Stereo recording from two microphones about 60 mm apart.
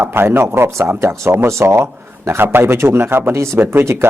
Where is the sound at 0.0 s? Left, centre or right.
Right.